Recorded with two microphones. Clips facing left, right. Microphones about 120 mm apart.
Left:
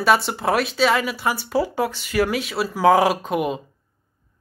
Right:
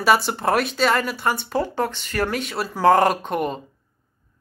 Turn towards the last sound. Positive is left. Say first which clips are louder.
# left 1 dB
turn(degrees=5)  # may be behind; listen again after turning